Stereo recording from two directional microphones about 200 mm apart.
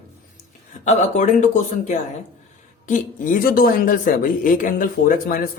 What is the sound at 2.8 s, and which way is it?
A woman's voice, 40° left (ahead or behind).